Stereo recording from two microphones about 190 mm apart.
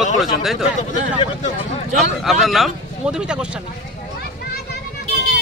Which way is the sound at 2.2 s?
Centre (ahead or behind).